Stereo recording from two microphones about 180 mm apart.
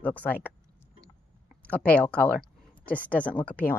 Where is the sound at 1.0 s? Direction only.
5° left (ahead or behind).